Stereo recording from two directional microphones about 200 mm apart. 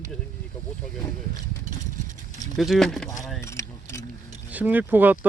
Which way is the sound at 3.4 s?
15° left (ahead or behind).